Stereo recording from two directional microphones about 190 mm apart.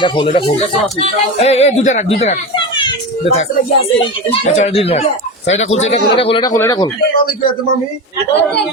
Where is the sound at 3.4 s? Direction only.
35° left (ahead or behind); by 6.9 s 20° left (ahead or behind).